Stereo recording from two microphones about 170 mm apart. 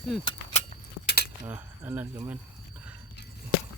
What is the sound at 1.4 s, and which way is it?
Cricket, 10° right (ahead or behind).